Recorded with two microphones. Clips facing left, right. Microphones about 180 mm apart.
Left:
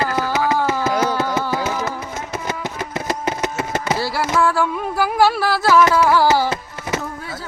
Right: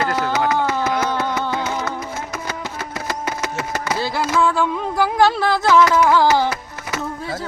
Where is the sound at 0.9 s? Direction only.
20° left (ahead or behind).